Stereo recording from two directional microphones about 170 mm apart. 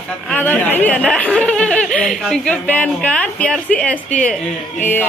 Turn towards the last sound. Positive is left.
turn(degrees=10)  # may be behind; listen again after turning